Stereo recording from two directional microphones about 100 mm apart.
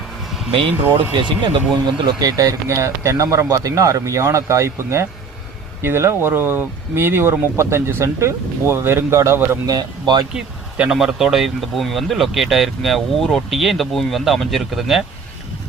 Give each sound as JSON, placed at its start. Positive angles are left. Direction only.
{"t": 0.5, "sound": "speech", "side_deg": -60}
{"t": 2.0, "sound": "speech", "side_deg": -45}
{"t": 9.6, "sound": "speech", "side_deg": -45}
{"t": 10.3, "sound": "speech", "side_deg": -10}